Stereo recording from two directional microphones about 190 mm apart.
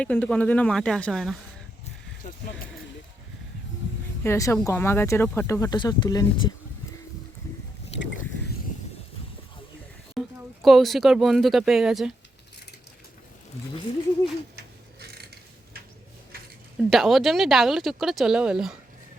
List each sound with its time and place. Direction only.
0.0 s speech: 5° left (ahead or behind)
4.2 s a woman's voice: 15° left (ahead or behind)
10.2 s speech: centre (ahead or behind)
15.0 s a sound: 55° right (ahead or behind)
16.7 s speech: centre (ahead or behind)